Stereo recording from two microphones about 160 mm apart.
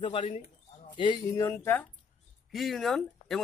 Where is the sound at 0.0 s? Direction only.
35° left (ahead or behind); by 1.9 s 15° left (ahead or behind).